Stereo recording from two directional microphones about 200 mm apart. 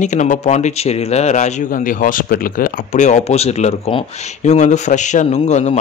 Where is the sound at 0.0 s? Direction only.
35° left (ahead or behind).